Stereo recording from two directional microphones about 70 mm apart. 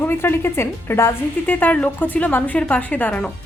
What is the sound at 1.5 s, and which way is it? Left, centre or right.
A woman's voice, left.